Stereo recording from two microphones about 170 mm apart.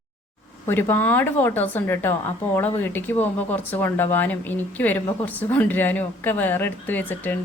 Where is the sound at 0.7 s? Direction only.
10° left (ahead or behind).